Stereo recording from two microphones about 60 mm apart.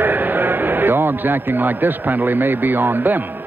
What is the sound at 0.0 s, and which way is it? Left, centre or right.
A man's voice, right.